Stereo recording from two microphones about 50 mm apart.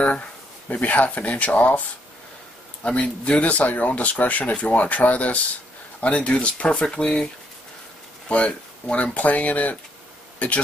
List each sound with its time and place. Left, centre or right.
0.7 s speech: left
2.8 s speech: left
8.3 s speech: left